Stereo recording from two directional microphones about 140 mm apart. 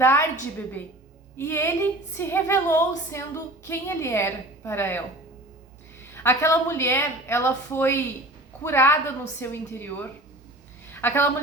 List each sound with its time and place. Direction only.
0.0 s music: 15° left (ahead or behind)
1.4 s music: 15° left (ahead or behind)
6.1 s music: 15° left (ahead or behind)